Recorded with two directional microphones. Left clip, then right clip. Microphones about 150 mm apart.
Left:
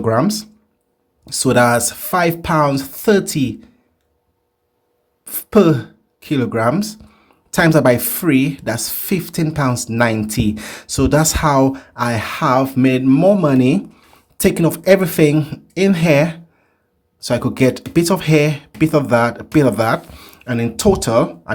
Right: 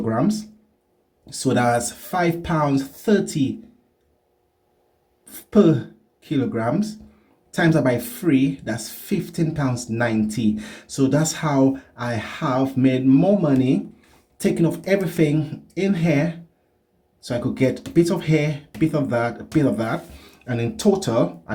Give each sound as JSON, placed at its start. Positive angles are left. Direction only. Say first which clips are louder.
{"t": 0.0, "sound": "speech", "louder": "left 7 dB", "side_deg": 65}
{"t": 5.2, "sound": "speech", "louder": "left 4 dB", "side_deg": 75}